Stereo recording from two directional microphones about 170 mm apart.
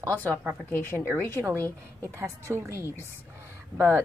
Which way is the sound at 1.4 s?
15° right (ahead or behind).